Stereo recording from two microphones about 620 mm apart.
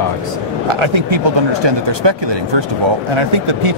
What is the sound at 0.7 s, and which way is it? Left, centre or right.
Speech, right.